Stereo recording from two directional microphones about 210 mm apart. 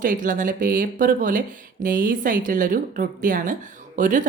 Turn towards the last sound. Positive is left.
turn(degrees=-40)  # may be behind; listen again after turning